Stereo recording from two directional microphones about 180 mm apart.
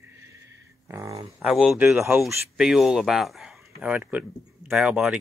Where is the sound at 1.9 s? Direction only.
10° right (ahead or behind).